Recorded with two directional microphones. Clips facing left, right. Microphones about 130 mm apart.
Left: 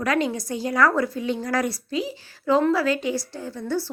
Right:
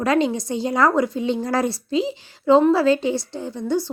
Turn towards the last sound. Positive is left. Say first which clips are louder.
# right 4 dB
turn(degrees=-20)  # may be behind; listen again after turning